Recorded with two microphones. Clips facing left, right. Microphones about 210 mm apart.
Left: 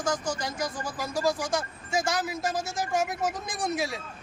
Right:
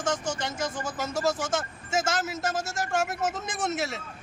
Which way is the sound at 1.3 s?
Centre (ahead or behind).